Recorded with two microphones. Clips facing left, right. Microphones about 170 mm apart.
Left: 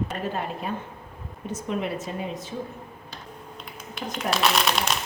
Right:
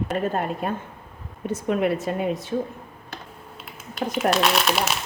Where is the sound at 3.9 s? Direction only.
Centre (ahead or behind).